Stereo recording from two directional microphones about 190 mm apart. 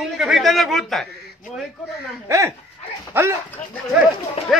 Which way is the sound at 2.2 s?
15° right (ahead or behind).